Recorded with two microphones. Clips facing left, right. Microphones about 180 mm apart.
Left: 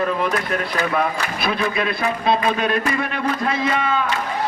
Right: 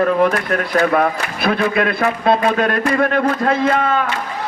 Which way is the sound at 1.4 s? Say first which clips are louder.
Right 6 dB; 55° right (ahead or behind).